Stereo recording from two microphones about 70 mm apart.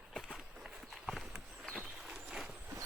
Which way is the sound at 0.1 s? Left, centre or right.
Centre.